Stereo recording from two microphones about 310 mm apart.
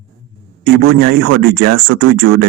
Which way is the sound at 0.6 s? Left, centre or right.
Right.